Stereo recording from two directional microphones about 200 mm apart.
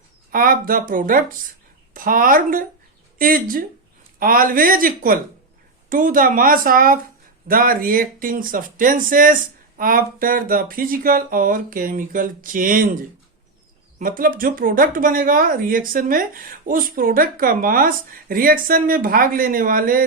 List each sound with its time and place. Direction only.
0.3 s speech: 45° right (ahead or behind)